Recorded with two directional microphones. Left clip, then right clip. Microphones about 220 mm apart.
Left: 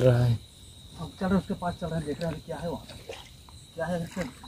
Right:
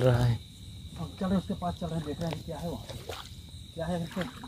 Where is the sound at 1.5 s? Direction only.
5° left (ahead or behind).